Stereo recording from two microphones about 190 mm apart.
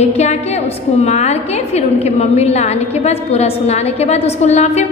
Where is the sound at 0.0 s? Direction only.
35° left (ahead or behind).